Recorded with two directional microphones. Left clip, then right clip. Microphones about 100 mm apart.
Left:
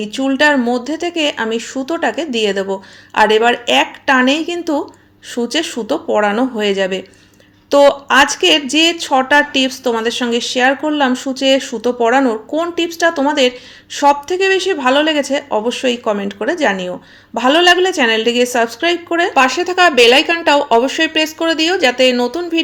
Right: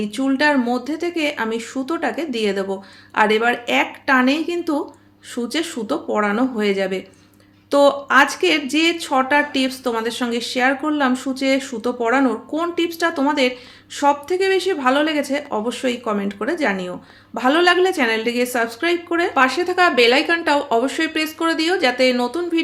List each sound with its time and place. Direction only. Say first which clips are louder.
0.0 s speech: left 5 dB; 30° left (ahead or behind)